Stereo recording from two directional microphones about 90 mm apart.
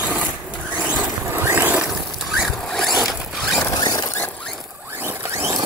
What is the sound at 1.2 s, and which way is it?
Vehicle, 25° right (ahead or behind).